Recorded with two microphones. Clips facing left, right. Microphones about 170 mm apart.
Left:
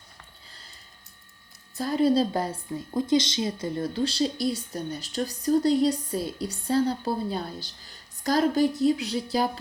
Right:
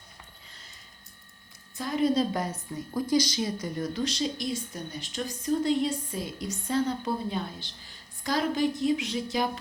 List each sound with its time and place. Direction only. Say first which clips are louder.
1.7 s a woman's voice: left 3 dB; 35° left (ahead or behind)